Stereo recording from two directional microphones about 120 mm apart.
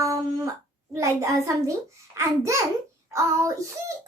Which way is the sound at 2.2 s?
25° right (ahead or behind).